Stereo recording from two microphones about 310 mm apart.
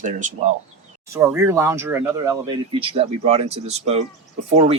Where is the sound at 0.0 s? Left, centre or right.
Right.